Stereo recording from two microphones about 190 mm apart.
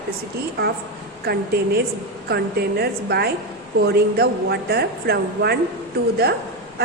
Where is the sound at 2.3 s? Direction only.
55° right (ahead or behind).